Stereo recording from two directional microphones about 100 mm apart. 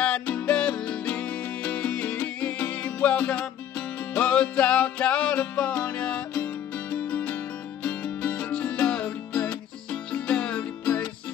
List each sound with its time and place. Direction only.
0.0 s music: 15° left (ahead or behind)